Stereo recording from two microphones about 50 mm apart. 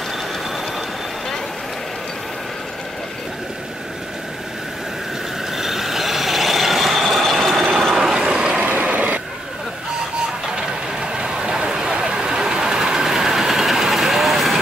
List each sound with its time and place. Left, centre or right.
5.6 s vehicle: centre
7.9 s ratchet: centre
8.2 s ratchet: right
8.9 s a sound: right
10.4 s vehicle: centre